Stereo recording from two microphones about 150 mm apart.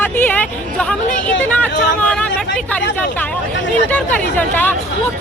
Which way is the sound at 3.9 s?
10° left (ahead or behind).